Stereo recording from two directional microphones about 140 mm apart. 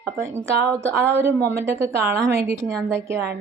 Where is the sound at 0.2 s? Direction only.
20° right (ahead or behind).